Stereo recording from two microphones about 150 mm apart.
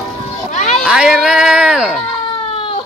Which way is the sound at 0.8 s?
5° right (ahead or behind).